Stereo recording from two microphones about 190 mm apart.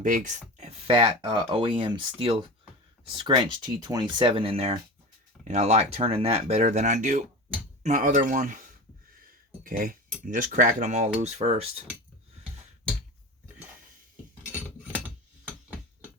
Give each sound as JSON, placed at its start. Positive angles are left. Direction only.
{"t": 0.0, "sound": "speech", "side_deg": -40}